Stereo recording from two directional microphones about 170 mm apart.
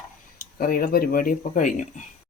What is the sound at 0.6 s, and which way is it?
Speech, 60° left (ahead or behind).